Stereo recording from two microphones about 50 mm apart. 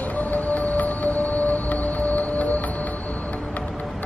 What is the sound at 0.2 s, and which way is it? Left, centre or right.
Music, left.